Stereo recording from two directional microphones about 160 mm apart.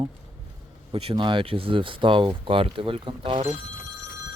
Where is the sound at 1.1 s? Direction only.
30° right (ahead or behind).